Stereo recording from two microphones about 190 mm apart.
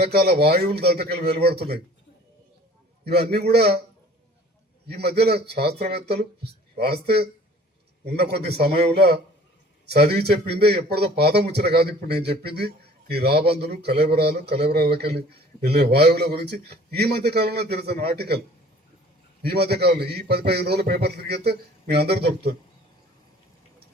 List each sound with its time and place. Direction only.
0.0 s a man's voice: 55° right (ahead or behind)
3.0 s a man's voice: 55° right (ahead or behind)
4.9 s a man's voice: 60° right (ahead or behind)
19.4 s a man's voice: 55° right (ahead or behind)